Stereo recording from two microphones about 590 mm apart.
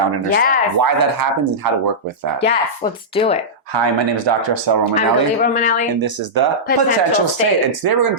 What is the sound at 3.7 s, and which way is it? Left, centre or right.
Speech, right.